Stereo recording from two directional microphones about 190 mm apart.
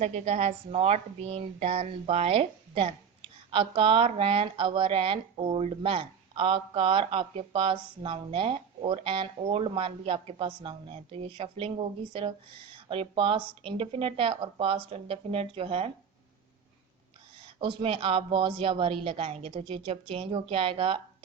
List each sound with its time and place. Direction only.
0.0 s speech: 35° right (ahead or behind)
17.4 s speech: 25° right (ahead or behind)